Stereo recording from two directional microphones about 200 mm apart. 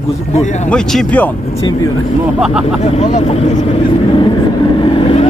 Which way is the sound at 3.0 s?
30° left (ahead or behind).